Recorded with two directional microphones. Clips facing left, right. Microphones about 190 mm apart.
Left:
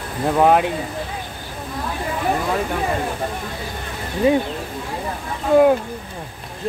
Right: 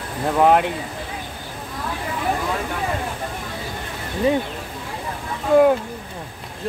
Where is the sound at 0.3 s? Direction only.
5° left (ahead or behind).